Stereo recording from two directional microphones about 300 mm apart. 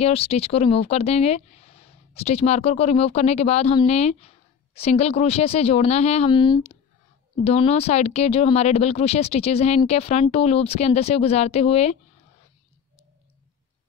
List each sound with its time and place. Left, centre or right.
0.0 s a woman's voice: centre